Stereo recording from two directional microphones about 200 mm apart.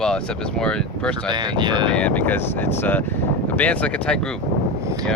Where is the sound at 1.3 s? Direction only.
25° right (ahead or behind).